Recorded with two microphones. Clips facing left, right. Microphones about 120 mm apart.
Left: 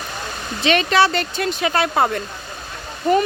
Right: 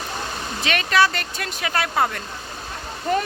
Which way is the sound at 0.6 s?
25° left (ahead or behind).